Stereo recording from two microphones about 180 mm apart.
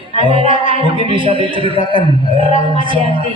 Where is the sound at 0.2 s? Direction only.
30° right (ahead or behind).